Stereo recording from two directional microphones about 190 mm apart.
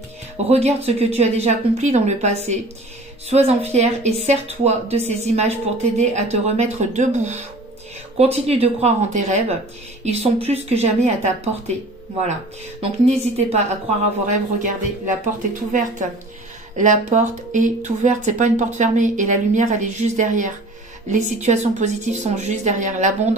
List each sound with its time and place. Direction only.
0.5 s speech: 35° right (ahead or behind)
8.5 s speech: 35° right (ahead or behind)
13.1 s speech: 35° right (ahead or behind)